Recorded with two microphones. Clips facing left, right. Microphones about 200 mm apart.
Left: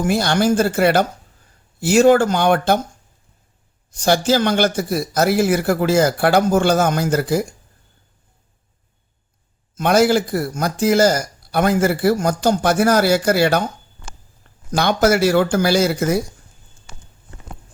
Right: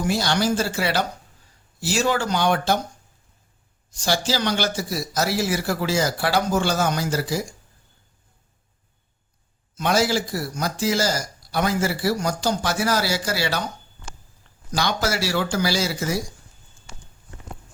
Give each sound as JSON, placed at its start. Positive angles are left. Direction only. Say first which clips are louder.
{"t": 0.0, "sound": "a man's voice", "louder": "left 5 dB", "side_deg": 55}
{"t": 4.0, "sound": "a man's voice", "louder": "left 7 dB", "side_deg": 55}
{"t": 9.7, "sound": "a man's voice", "louder": "left 6 dB", "side_deg": 55}
{"t": 14.7, "sound": "a man's voice", "louder": "left 8 dB", "side_deg": 55}